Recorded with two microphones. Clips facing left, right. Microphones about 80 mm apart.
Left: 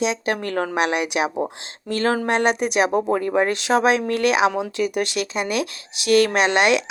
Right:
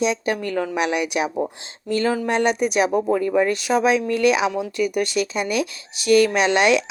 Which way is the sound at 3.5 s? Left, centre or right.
Left.